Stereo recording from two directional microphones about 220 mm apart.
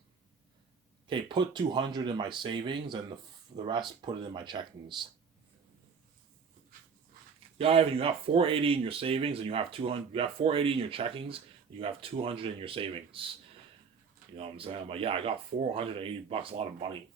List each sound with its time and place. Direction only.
1.0 s speech: 20° right (ahead or behind)
7.6 s speech: 25° right (ahead or behind)
14.3 s speech: 25° right (ahead or behind)